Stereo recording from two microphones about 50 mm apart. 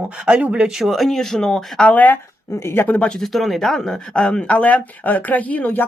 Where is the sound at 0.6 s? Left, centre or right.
Centre.